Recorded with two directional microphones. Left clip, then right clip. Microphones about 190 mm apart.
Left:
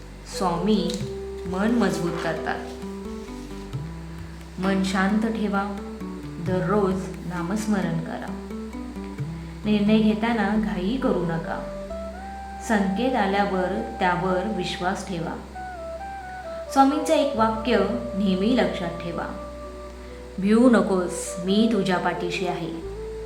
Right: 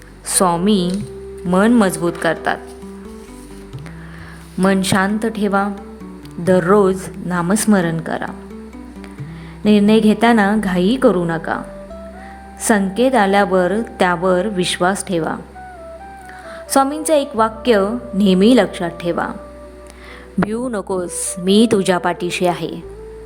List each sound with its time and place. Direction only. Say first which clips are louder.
0.3 s a woman's voice: right 8 dB; 60° right (ahead or behind)
4.6 s a woman's voice: right 8 dB; 55° right (ahead or behind)
9.6 s a woman's voice: right 9 dB; 55° right (ahead or behind)
12.6 s a woman's voice: right 9 dB; 55° right (ahead or behind)
16.7 s a woman's voice: right 5 dB; 55° right (ahead or behind)
20.5 s a woman's voice: left 7 dB; 55° right (ahead or behind)